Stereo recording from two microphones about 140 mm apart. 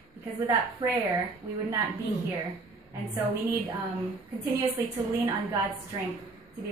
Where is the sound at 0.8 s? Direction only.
25° right (ahead or behind).